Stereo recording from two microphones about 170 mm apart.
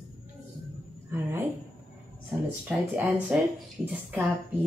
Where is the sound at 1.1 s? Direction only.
15° right (ahead or behind).